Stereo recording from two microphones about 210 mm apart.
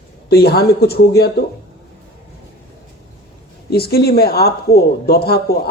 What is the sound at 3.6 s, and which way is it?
A woman's voice, 50° left (ahead or behind).